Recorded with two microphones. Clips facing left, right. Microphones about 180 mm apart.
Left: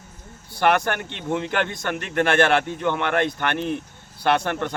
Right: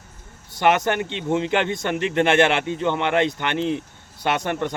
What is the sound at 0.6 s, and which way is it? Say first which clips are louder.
A man's voice: right 1 dB; 20° right (ahead or behind).